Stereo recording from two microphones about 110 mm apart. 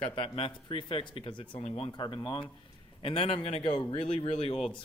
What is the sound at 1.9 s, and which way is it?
Speech, 45° left (ahead or behind).